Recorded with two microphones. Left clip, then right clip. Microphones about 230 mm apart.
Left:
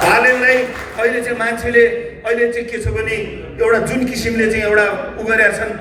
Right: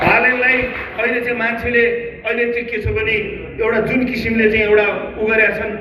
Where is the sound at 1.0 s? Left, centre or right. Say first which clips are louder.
Left 1 dB; left.